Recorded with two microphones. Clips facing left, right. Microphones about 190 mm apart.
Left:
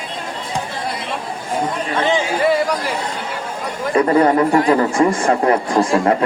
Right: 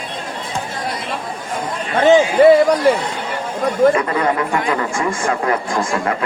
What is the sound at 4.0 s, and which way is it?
Speech, 35° left (ahead or behind).